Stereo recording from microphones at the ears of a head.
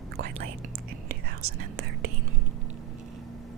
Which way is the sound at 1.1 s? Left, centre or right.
Right.